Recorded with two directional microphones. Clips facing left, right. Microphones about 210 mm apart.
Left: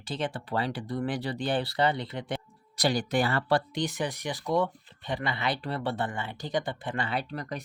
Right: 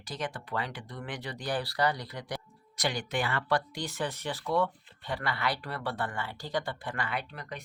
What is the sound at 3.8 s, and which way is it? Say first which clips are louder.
Speech: left 3 dB; 15° left (ahead or behind).